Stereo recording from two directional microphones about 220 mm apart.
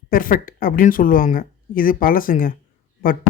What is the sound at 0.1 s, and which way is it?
Speech, 40° left (ahead or behind).